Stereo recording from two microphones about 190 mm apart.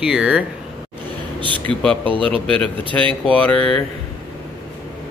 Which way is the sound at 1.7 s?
5° left (ahead or behind).